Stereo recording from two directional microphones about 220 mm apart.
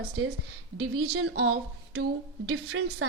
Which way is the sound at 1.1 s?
80° right.